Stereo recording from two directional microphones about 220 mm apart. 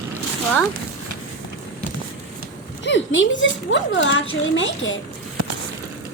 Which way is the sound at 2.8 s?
55° left (ahead or behind).